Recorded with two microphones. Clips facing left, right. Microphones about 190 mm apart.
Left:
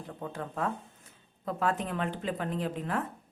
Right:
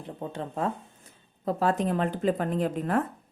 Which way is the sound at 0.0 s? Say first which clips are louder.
Right 3 dB; 25° right (ahead or behind).